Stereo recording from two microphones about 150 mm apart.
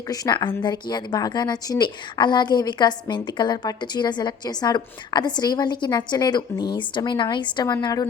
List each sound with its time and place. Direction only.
0.1 s a woman's voice: 30° left (ahead or behind)